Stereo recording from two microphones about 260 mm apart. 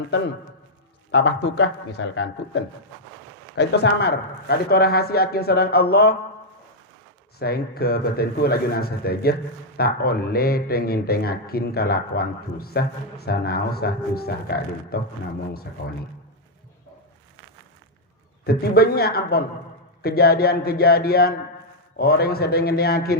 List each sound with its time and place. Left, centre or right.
1.1 s a man's voice: left
7.3 s a man's voice: left
18.4 s a man's voice: left